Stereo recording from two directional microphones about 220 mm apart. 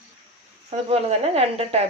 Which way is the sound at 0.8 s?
25° right (ahead or behind).